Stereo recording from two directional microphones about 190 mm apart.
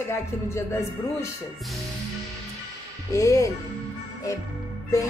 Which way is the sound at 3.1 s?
15° left (ahead or behind).